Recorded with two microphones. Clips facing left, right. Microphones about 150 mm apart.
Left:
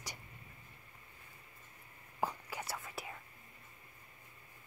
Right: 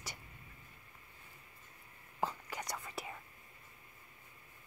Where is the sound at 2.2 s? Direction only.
10° left (ahead or behind).